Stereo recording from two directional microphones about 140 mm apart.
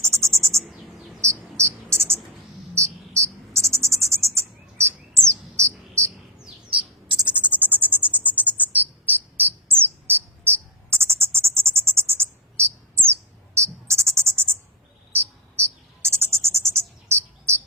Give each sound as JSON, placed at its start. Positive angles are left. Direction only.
{"t": 0.0, "sound": "cricket", "side_deg": -20}
{"t": 5.3, "sound": "bird", "side_deg": -20}
{"t": 7.4, "sound": "a sound", "side_deg": -10}
{"t": 8.4, "sound": "cricket", "side_deg": -10}
{"t": 15.5, "sound": "bird", "side_deg": -20}